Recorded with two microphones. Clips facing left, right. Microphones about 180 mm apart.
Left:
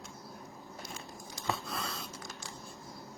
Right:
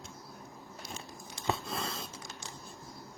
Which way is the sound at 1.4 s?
20° right (ahead or behind).